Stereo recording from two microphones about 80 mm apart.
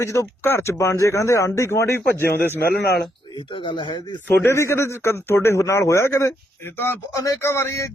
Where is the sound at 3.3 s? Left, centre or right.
Left.